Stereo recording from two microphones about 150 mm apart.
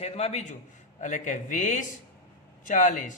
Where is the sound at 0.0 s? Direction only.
45° left (ahead or behind).